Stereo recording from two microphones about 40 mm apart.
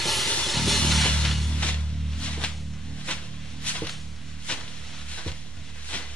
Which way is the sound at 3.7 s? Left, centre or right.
Left.